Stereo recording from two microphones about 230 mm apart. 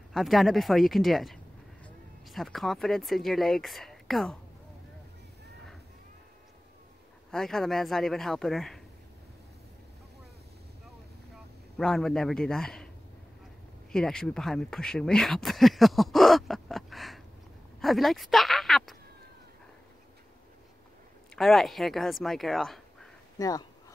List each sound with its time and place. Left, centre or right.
0.1 s speech: centre
7.2 s speech: centre
11.7 s speech: centre
13.9 s speech: centre
21.4 s speech: centre
23.3 s speech: centre